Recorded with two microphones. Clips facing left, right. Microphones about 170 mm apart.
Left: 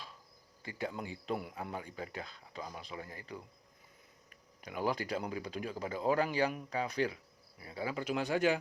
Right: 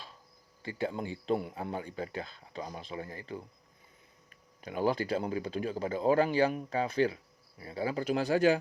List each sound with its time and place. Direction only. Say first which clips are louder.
0.6 s speech: right 5 dB; 30° right (ahead or behind)
4.6 s speech: right 5 dB; 30° right (ahead or behind)